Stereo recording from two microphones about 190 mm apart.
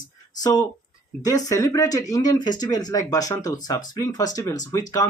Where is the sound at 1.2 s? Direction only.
20° left (ahead or behind).